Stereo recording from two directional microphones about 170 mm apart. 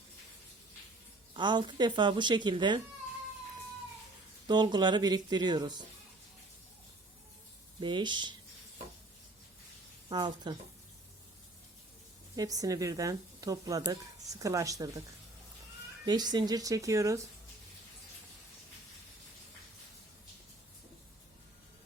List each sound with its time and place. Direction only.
1.3 s a woman's voice: 25° right (ahead or behind)
4.4 s a woman's voice: 25° right (ahead or behind)
7.8 s a woman's voice: 30° right (ahead or behind)
10.1 s a woman's voice: 25° right (ahead or behind)
12.4 s a woman's voice: 20° right (ahead or behind)
16.0 s a woman's voice: 25° right (ahead or behind)